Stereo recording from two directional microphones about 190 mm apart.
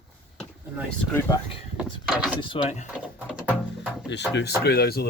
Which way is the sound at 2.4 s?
30° left (ahead or behind).